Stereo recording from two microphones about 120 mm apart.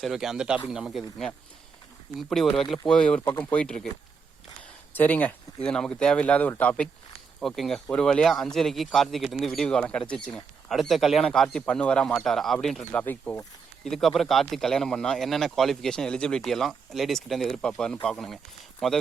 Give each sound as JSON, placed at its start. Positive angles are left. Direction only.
{"t": 0.0, "sound": "speech", "side_deg": -5}
{"t": 4.9, "sound": "speech", "side_deg": 15}
{"t": 7.3, "sound": "speech", "side_deg": 0}
{"t": 12.8, "sound": "speech", "side_deg": 15}
{"t": 13.8, "sound": "speech", "side_deg": 5}